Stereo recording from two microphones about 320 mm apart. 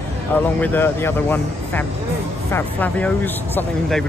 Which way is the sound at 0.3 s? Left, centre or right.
Centre.